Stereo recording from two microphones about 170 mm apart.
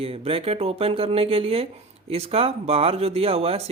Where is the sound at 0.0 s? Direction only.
35° right (ahead or behind).